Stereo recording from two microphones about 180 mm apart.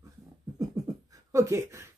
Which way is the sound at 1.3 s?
15° right (ahead or behind).